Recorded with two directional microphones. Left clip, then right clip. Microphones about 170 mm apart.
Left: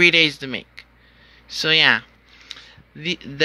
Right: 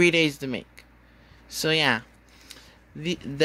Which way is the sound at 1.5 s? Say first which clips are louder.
Left 7 dB; 15° right (ahead or behind).